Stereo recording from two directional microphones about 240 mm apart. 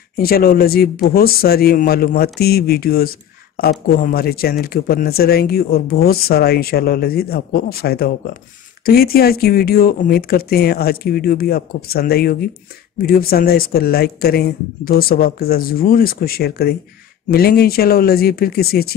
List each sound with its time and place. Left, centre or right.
0.2 s speech: left